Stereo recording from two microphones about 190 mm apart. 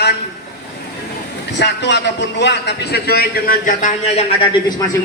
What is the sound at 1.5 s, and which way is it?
A man's voice, 65° left (ahead or behind).